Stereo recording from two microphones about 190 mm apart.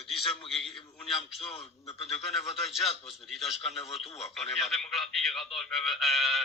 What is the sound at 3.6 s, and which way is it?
Speech, 30° left (ahead or behind).